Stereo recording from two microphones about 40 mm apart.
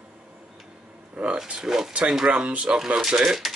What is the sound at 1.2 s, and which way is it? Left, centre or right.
Speech, right.